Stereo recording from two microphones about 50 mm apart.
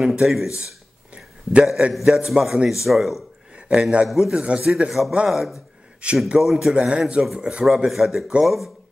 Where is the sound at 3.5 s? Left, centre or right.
Right.